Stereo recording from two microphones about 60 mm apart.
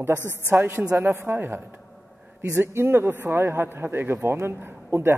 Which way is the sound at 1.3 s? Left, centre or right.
Right.